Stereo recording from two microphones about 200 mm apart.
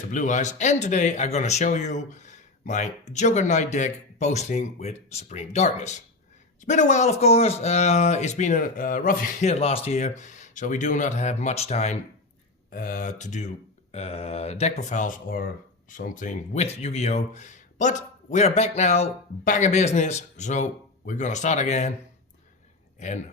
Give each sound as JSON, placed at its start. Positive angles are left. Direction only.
{"t": 0.1, "sound": "speech", "side_deg": 40}
{"t": 12.7, "sound": "speech", "side_deg": 45}
{"t": 23.0, "sound": "speech", "side_deg": 35}